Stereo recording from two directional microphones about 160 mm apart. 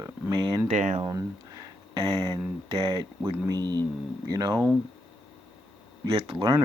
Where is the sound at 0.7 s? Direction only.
50° right (ahead or behind).